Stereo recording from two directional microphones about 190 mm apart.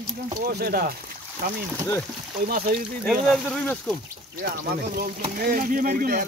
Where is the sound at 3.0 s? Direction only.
5° left (ahead or behind).